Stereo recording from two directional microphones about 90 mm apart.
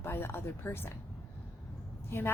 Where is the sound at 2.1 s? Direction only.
25° left (ahead or behind).